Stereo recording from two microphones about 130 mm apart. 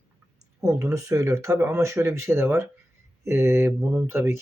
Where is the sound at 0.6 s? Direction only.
25° right (ahead or behind).